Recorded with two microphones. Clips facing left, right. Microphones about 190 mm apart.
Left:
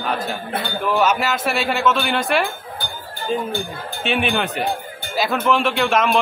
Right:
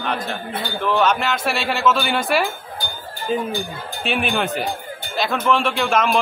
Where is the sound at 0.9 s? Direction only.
5° left (ahead or behind).